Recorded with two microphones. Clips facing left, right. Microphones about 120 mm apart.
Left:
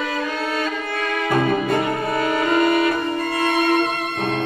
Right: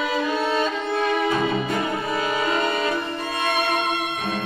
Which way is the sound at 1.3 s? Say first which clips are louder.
Left 4 dB; 55° left (ahead or behind).